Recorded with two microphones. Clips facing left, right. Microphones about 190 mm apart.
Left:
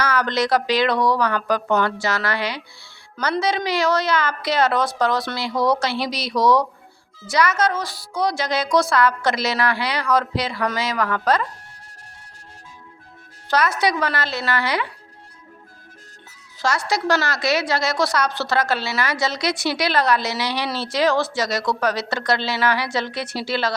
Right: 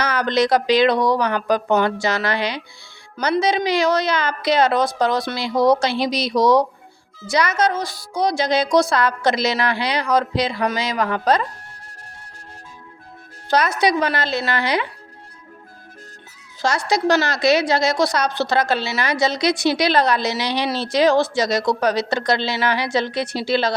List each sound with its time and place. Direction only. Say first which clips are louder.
0.0 s a woman's voice: right 2 dB; 15° right (ahead or behind)
13.5 s a woman's voice: right 2 dB; 15° right (ahead or behind)
16.6 s a woman's voice: right 2 dB; 15° right (ahead or behind)